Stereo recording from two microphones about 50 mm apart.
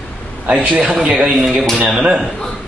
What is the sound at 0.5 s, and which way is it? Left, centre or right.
Speech, right.